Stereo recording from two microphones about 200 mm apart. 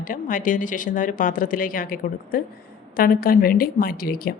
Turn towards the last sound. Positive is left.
turn(degrees=45)  # may be behind; listen again after turning